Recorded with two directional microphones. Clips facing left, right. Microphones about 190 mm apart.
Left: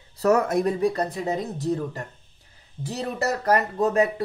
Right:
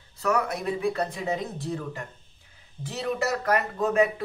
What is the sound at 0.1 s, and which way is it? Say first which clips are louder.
Speech: left 6 dB; 40° left (ahead or behind).